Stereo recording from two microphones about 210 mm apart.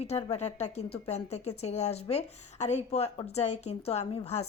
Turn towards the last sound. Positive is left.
turn(degrees=30)  # may be behind; listen again after turning